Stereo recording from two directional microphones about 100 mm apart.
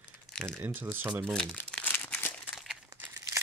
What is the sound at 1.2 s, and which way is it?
Speech, 5° left (ahead or behind).